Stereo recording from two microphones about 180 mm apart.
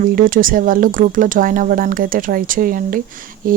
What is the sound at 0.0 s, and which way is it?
Speech, 50° right (ahead or behind).